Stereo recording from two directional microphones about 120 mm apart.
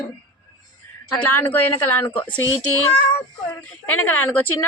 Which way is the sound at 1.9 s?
15° left (ahead or behind).